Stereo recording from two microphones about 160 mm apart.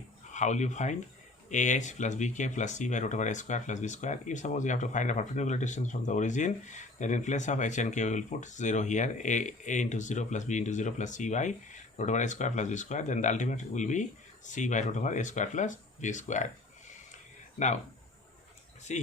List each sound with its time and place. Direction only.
0.3 s speech: 50° left (ahead or behind)
18.9 s speech: 45° left (ahead or behind)